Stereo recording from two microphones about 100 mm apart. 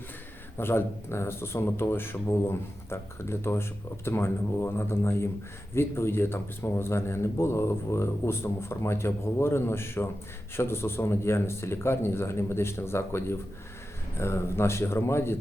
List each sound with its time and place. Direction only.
0.5 s speech: 25° left (ahead or behind)